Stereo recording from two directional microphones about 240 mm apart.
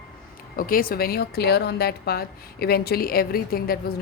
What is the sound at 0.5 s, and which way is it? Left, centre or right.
Speech, left.